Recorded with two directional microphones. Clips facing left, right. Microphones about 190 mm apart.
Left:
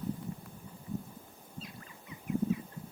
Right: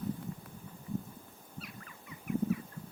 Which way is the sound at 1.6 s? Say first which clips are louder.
Left 1 dB; 25° left (ahead or behind).